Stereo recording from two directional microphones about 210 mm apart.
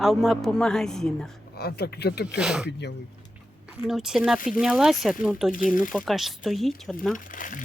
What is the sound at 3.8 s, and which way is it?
Speech, centre (ahead or behind).